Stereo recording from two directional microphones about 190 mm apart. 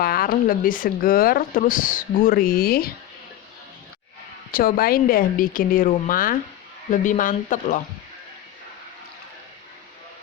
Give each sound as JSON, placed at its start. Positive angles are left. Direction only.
{"t": 0.0, "sound": "speech", "side_deg": 50}
{"t": 4.5, "sound": "speech", "side_deg": 50}